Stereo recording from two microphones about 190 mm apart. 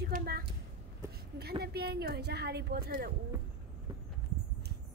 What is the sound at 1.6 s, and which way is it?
A woman's voice, 55° right (ahead or behind).